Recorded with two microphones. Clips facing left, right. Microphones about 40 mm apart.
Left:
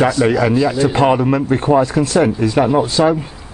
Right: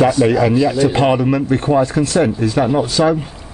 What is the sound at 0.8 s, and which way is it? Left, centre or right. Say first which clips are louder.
Speech: right 1 dB; centre.